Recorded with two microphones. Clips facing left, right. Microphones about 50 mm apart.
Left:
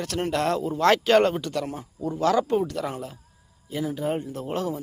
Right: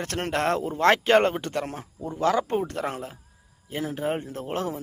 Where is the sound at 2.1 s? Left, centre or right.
Centre.